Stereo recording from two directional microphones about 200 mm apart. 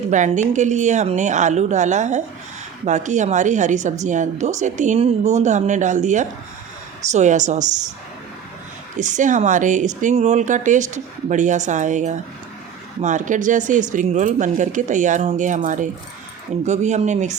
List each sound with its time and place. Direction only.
0.1 s speech: 40° right (ahead or behind)
9.0 s speech: 40° right (ahead or behind)